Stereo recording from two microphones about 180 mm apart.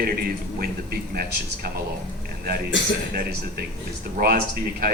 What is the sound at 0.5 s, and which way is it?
Speech, 55° right (ahead or behind).